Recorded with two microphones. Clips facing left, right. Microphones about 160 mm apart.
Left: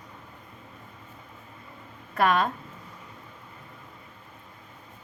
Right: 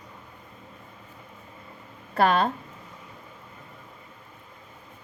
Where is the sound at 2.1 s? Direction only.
30° right (ahead or behind).